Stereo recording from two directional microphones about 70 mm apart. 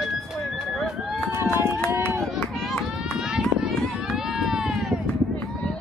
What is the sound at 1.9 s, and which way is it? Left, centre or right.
Run, right.